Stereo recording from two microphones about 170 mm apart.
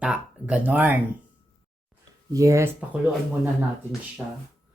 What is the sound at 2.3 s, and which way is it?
Speech, 20° right (ahead or behind).